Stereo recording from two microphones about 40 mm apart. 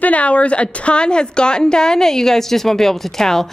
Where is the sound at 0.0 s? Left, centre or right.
Left.